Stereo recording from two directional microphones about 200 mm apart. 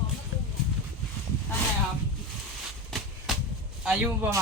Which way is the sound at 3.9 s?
5° right (ahead or behind).